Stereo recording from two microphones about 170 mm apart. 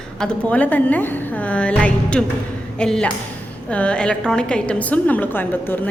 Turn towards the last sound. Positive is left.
turn(degrees=10)  # may be behind; listen again after turning